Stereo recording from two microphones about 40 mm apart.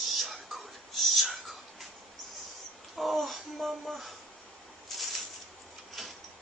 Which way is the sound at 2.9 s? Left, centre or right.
Centre.